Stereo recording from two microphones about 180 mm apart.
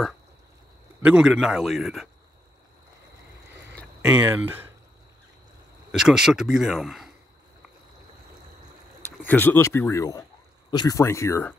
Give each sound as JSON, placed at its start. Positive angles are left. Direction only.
{"t": 1.0, "sound": "speech", "side_deg": -5}
{"t": 4.0, "sound": "speech", "side_deg": -5}
{"t": 5.9, "sound": "speech", "side_deg": -5}
{"t": 9.2, "sound": "speech", "side_deg": 10}